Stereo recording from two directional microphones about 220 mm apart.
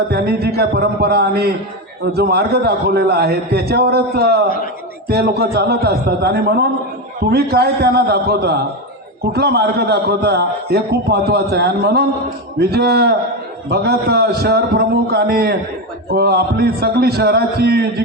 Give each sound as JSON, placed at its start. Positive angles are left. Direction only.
{"t": 0.1, "sound": "a man's voice", "side_deg": -45}